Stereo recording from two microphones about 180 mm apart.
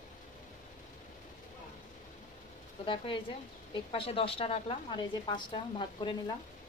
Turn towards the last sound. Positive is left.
turn(degrees=25)  # may be behind; listen again after turning